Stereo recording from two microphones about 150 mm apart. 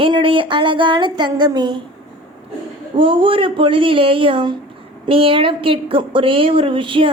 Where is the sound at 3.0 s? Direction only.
35° right (ahead or behind).